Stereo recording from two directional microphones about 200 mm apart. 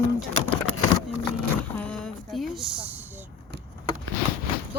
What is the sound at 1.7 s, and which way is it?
Vehicle, 5° left (ahead or behind).